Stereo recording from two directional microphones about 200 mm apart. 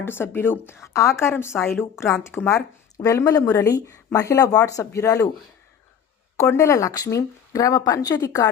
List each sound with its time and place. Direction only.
0.0 s speech: 10° left (ahead or behind)
6.4 s speech: 15° left (ahead or behind)